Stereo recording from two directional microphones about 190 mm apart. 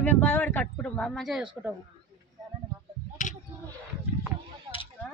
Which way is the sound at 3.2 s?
40° left (ahead or behind).